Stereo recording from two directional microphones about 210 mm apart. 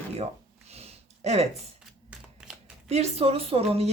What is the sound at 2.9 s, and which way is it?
A woman's voice, 30° right (ahead or behind).